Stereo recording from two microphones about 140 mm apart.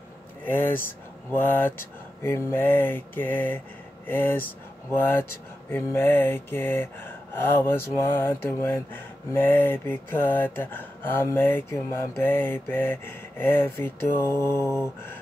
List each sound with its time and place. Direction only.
0.5 s gasp: 15° left (ahead or behind)